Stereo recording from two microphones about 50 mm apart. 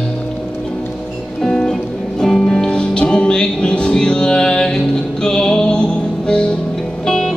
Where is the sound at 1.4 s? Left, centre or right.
Centre.